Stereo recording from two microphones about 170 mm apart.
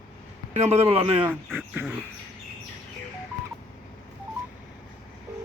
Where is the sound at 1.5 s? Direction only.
5° right (ahead or behind).